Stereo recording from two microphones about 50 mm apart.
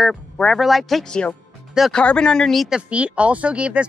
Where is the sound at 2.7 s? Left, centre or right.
Right.